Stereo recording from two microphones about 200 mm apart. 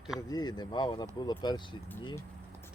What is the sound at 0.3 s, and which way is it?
Speech, 20° left (ahead or behind).